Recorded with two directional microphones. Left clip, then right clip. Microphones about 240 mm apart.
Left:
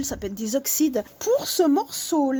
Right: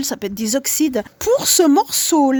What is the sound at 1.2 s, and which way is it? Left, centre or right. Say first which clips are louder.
Speech: right 7 dB; right.